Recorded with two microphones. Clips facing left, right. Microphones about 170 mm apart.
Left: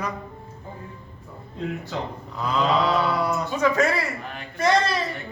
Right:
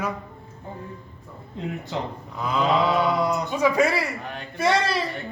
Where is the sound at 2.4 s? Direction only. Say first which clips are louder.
Even; centre (ahead or behind).